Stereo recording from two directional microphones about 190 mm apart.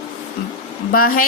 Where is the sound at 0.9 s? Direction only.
50° left (ahead or behind).